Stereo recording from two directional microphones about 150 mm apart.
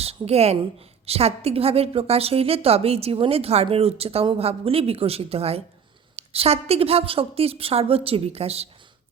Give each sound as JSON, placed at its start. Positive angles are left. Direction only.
{"t": 0.0, "sound": "a woman's voice", "side_deg": -40}